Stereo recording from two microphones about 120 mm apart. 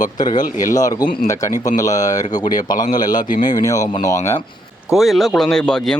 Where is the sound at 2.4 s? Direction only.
90° left.